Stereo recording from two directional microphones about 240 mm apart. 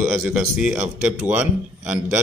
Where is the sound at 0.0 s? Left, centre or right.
Centre.